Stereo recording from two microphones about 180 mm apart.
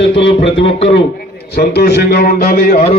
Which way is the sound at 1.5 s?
65° left (ahead or behind).